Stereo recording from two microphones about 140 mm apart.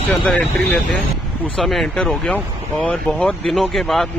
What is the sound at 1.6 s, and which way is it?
Speech, centre (ahead or behind).